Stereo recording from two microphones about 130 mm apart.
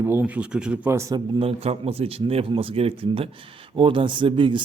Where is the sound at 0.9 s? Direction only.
20° right (ahead or behind).